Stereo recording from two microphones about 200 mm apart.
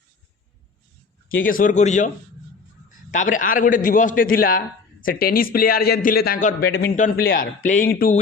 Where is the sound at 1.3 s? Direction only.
45° left (ahead or behind).